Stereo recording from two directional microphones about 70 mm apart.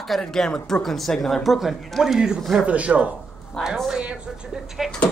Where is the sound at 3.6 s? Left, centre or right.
Centre.